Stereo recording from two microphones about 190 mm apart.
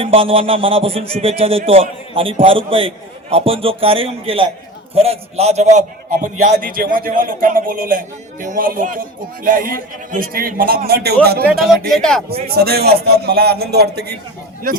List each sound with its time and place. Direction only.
0.0 s a man's voice: 30° right (ahead or behind); by 11.9 s 55° right (ahead or behind)
11.9 s speech: 5° left (ahead or behind)
12.5 s a man's voice: 55° right (ahead or behind)